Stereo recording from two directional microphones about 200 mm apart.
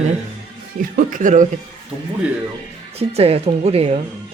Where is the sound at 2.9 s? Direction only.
30° right (ahead or behind).